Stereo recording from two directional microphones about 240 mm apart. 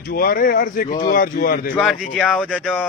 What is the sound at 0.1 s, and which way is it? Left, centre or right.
Speech, left.